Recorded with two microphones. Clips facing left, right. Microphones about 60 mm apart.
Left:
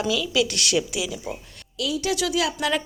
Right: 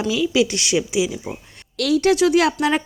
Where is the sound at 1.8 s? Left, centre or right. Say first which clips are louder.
Right 9 dB; right.